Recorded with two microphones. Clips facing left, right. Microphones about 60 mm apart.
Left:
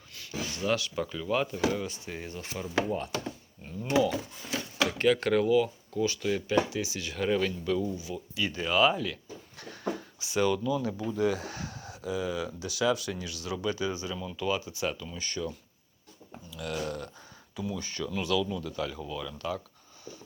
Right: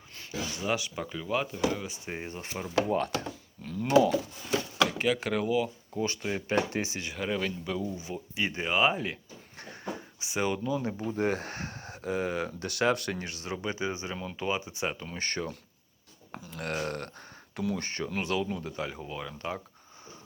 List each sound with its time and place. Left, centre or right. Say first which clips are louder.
0.1 s a sound: even; right
0.6 s speech: left 3 dB; centre
2.0 s speech: right 1 dB; right
2.9 s speech: right 3 dB; right
4.9 s speech: left 4 dB; centre
5.9 s speech: left 3 dB; right
7.1 s speech: left 6 dB; centre
7.9 s speech: even; right
13.2 s speech: left 2 dB; right
15.0 s speech: right 1 dB; right
17.8 s speech: even; right